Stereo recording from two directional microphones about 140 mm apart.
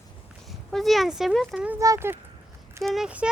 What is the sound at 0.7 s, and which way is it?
Speech, centre (ahead or behind).